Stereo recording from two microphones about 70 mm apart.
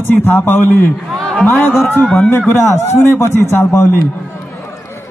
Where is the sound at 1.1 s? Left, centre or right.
Centre.